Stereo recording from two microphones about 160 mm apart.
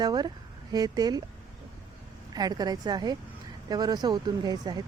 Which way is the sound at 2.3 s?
25° right (ahead or behind).